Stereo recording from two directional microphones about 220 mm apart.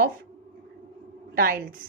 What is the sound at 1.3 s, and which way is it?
Speech, 45° right (ahead or behind).